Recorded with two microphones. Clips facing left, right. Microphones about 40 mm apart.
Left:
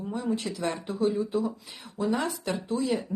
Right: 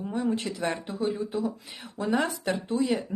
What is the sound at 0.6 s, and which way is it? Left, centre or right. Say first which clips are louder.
Speech: right 2 dB; centre.